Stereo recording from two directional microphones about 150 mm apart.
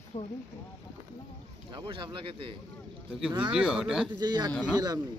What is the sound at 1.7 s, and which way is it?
Speech, 30° right (ahead or behind).